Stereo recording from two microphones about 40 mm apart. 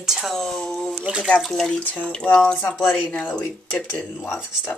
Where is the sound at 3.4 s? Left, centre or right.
Left.